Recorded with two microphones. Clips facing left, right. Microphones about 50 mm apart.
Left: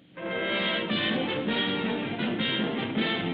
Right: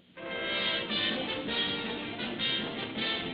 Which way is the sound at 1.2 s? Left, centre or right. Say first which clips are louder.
Left 5 dB; centre.